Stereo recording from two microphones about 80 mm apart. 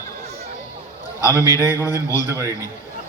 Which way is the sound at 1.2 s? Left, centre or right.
Left.